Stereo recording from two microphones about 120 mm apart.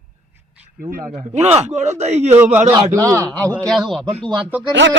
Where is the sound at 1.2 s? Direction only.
75° right (ahead or behind).